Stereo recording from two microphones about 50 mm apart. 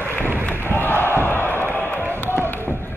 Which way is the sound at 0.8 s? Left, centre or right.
Left.